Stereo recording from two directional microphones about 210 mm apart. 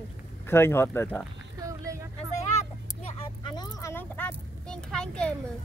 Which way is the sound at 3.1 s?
20° left (ahead or behind).